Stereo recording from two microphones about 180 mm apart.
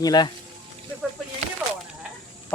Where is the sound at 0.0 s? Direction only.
20° left (ahead or behind).